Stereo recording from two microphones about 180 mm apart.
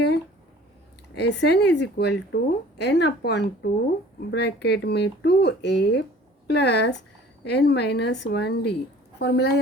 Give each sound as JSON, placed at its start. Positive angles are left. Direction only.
{"t": 1.1, "sound": "a woman's voice", "side_deg": 70}